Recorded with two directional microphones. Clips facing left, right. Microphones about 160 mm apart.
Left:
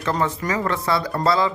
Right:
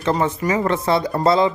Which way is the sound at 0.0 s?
20° right (ahead or behind).